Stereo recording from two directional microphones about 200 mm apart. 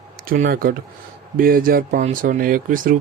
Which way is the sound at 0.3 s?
45° right (ahead or behind).